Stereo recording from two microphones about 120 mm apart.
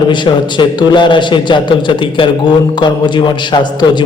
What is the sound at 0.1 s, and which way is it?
A man's voice, 40° left (ahead or behind).